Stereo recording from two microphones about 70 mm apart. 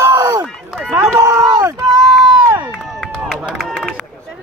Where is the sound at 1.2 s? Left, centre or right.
Right.